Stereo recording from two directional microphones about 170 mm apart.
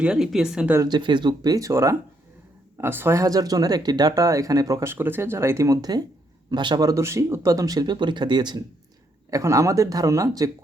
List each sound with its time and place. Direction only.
0.0 s speech: 5° right (ahead or behind)
0.8 s speech: 25° right (ahead or behind)